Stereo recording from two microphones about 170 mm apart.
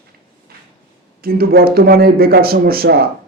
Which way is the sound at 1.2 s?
65° right (ahead or behind).